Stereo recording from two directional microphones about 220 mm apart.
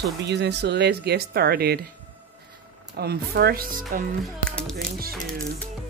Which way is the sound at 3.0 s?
45° right (ahead or behind).